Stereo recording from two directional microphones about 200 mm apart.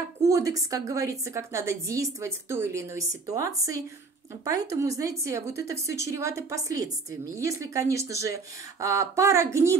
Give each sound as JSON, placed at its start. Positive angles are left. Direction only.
{"t": 0.2, "sound": "a woman's voice", "side_deg": -15}